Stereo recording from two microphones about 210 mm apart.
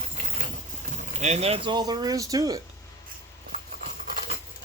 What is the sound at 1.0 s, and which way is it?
Speech, 35° right (ahead or behind).